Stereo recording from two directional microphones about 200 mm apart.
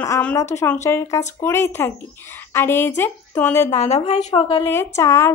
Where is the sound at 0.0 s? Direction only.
10° left (ahead or behind).